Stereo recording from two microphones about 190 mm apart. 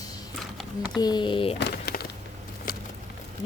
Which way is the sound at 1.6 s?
60° left (ahead or behind).